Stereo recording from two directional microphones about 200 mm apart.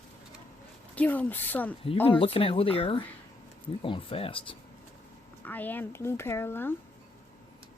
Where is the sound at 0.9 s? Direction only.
5° left (ahead or behind).